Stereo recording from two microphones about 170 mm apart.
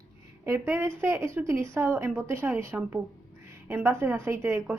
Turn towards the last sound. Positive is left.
turn(degrees=-15)  # may be behind; listen again after turning